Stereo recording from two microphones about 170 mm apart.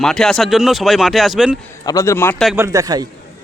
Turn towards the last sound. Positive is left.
turn(degrees=-20)  # may be behind; listen again after turning